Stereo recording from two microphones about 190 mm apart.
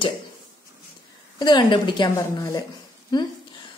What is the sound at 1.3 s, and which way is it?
A woman's voice, 25° left (ahead or behind).